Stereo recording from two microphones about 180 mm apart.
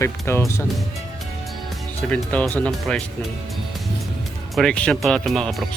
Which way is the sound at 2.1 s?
10° left (ahead or behind).